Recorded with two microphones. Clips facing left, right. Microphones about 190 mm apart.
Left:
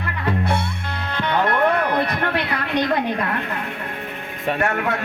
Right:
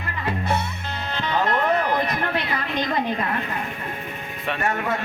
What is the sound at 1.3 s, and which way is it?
Music, 65° left (ahead or behind).